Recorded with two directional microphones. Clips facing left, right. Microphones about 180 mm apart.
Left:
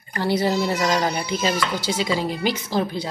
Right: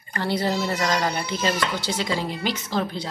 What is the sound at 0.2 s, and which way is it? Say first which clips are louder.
A woman's voice: left 3 dB; 10° left (ahead or behind).